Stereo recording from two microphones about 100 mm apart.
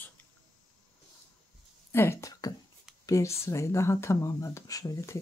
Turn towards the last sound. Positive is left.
turn(degrees=30)  # may be behind; listen again after turning